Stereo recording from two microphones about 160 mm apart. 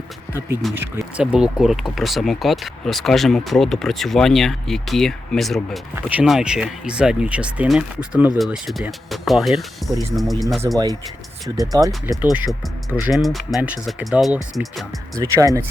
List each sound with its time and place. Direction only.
0.3 s speech: 15° right (ahead or behind)
0.9 s speech: 5° right (ahead or behind)
6.0 s speech: 10° right (ahead or behind)
11.4 s speech: 20° right (ahead or behind)
12.2 s speech: 10° right (ahead or behind)
15.1 s speech: 20° right (ahead or behind)